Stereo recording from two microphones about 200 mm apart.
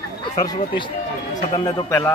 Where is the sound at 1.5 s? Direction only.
10° left (ahead or behind).